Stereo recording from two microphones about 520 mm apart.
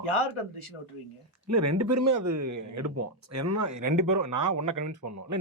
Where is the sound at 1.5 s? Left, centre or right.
Right.